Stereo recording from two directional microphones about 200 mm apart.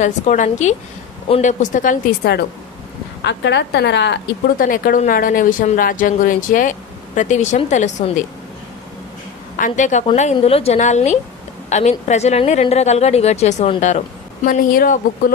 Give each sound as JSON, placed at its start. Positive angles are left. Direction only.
{"t": 0.0, "sound": "a woman's voice", "side_deg": 40}
{"t": 9.6, "sound": "a woman's voice", "side_deg": 40}